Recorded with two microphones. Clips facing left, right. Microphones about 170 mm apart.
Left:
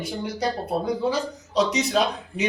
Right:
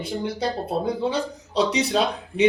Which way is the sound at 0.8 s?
30° right (ahead or behind).